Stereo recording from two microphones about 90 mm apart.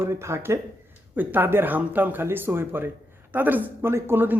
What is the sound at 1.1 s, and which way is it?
Speech, 20° right (ahead or behind).